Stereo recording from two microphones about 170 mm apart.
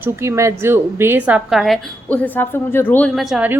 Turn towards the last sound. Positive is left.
turn(degrees=-5)  # may be behind; listen again after turning